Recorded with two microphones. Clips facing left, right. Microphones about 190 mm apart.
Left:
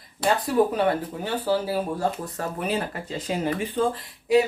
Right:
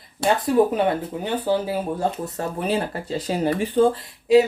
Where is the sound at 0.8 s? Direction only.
20° right (ahead or behind).